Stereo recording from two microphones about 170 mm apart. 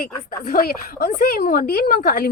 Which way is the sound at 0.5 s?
60° left (ahead or behind).